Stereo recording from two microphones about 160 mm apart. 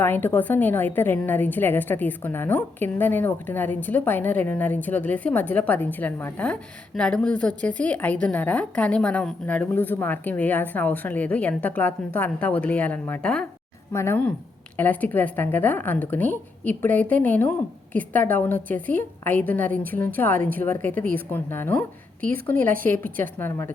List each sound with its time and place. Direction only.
0.0 s a woman's voice: 10° left (ahead or behind)
23.4 s a woman's voice: 15° left (ahead or behind)